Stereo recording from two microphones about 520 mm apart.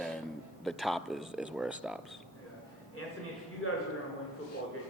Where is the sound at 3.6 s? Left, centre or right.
Left.